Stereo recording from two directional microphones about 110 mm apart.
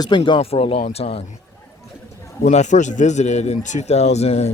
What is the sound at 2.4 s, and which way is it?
A man's voice, 90° left.